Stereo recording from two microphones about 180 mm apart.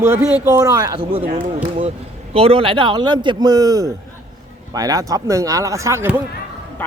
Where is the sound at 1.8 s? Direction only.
30° right (ahead or behind); by 6.2 s 15° right (ahead or behind).